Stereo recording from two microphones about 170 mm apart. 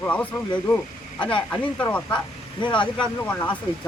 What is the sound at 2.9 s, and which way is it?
Speech, 10° left (ahead or behind).